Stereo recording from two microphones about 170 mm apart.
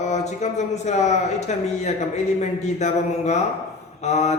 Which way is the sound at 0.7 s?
40° left (ahead or behind).